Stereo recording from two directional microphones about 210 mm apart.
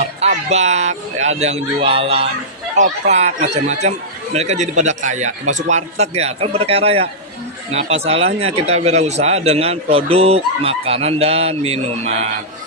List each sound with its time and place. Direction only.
0.2 s a man's voice: 30° right (ahead or behind)